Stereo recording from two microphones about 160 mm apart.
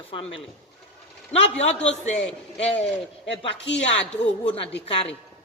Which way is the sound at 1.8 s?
45° left (ahead or behind).